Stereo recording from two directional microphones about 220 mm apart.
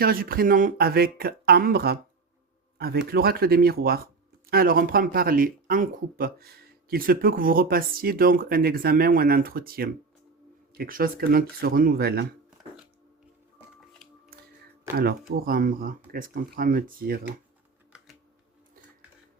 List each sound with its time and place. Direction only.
0.0 s speech: 40° right (ahead or behind)
15.3 s speech: 40° right (ahead or behind)